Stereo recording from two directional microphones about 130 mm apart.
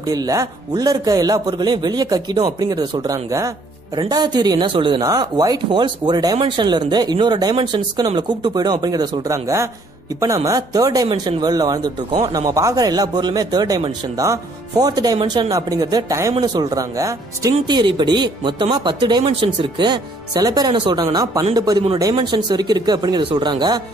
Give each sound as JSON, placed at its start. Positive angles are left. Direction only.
{"t": 0.0, "sound": "speech", "side_deg": -30}